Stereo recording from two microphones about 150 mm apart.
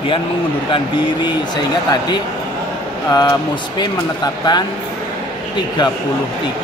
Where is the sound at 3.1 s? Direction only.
25° left (ahead or behind).